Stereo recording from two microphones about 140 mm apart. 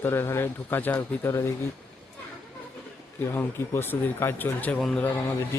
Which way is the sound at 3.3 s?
15° left (ahead or behind).